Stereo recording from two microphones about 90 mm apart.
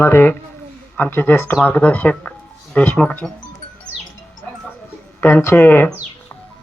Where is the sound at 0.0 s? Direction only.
25° left (ahead or behind).